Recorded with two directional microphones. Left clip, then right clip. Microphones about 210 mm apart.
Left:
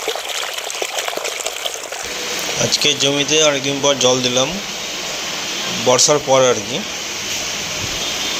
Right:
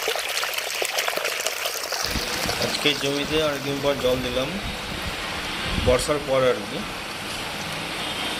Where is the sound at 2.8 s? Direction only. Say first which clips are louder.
Left 7 dB; 20° left (ahead or behind).